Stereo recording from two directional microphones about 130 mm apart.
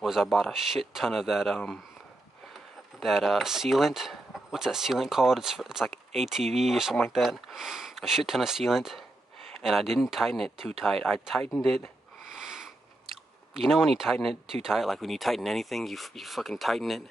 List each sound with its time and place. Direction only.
0.0 s speech: centre (ahead or behind)
3.0 s speech: centre (ahead or behind)
12.3 s sniff: 5° right (ahead or behind)
13.6 s speech: centre (ahead or behind)